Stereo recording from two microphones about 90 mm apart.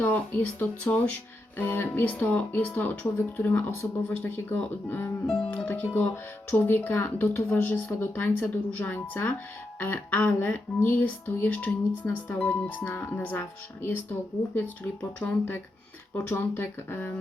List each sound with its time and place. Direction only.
0.0 s speech: 20° left (ahead or behind)
15.2 s speech: 20° left (ahead or behind)